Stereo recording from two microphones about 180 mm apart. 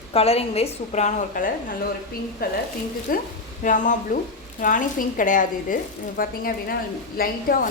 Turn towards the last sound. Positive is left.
turn(degrees=55)  # may be behind; listen again after turning